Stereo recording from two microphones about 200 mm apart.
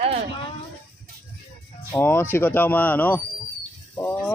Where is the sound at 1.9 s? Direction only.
10° left (ahead or behind).